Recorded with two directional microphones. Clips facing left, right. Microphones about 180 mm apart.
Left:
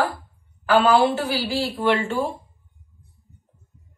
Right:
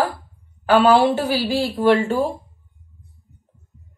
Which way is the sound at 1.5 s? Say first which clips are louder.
Right 5 dB; 40° right (ahead or behind).